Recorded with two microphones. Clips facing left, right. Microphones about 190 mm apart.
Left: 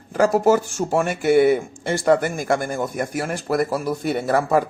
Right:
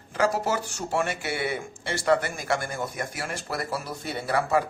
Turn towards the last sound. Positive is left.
turn(degrees=45)  # may be behind; listen again after turning